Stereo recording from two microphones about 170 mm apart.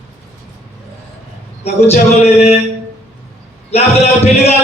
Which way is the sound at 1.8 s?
40° left (ahead or behind).